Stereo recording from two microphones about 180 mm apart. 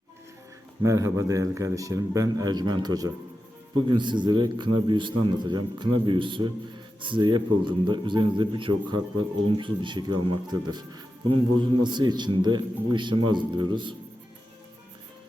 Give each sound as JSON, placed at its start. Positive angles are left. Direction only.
{"t": 0.8, "sound": "a man's voice", "side_deg": -15}